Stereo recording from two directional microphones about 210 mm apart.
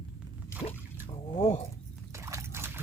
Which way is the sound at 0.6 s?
25° left (ahead or behind).